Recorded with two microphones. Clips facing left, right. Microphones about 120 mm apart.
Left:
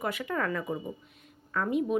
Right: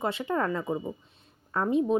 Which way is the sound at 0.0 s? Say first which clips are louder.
Right 3 dB; 30° right (ahead or behind).